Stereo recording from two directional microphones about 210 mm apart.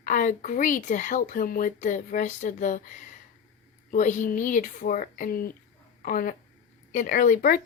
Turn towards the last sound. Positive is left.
turn(degrees=40)  # may be behind; listen again after turning